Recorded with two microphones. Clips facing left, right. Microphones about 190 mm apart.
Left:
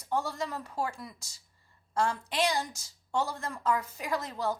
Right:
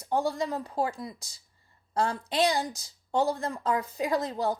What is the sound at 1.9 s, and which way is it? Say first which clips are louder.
A woman's voice: right 2 dB; 35° right (ahead or behind).